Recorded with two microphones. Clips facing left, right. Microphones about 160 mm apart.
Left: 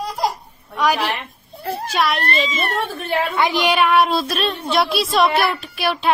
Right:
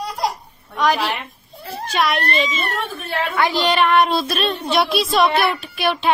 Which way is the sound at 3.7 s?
5° left (ahead or behind).